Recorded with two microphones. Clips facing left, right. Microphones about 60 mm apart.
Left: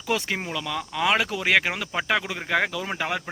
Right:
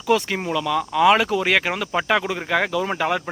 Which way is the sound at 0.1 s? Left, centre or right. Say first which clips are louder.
Right 6 dB; centre.